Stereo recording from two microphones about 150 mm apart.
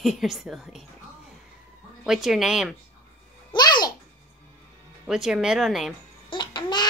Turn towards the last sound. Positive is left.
turn(degrees=30)  # may be behind; listen again after turning